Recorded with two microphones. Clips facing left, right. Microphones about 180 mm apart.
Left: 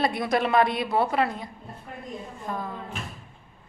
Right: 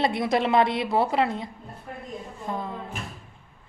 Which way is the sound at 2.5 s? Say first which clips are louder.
Right 1 dB; 25° right (ahead or behind).